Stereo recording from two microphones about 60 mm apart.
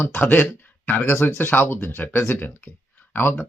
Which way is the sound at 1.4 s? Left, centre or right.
Left.